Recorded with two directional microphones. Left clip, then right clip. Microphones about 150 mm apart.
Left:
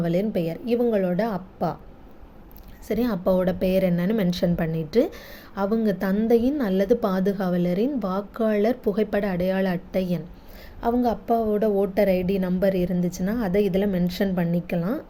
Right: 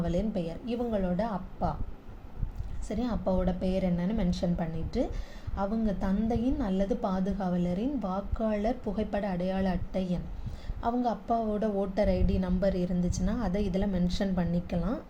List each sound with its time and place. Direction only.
0.0 s a woman's voice: 45° left (ahead or behind)
2.8 s a woman's voice: 50° left (ahead or behind)